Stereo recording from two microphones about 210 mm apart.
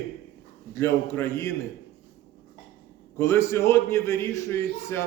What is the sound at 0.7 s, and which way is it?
Speech, 10° left (ahead or behind).